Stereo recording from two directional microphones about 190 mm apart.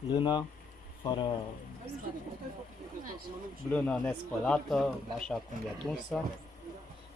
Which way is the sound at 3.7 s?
10° left (ahead or behind).